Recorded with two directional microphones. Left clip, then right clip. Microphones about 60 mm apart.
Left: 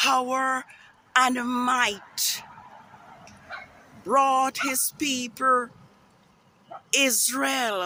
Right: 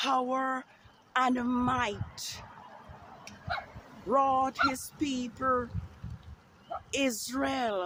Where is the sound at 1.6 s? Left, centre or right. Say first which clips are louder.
Left 7 dB; left.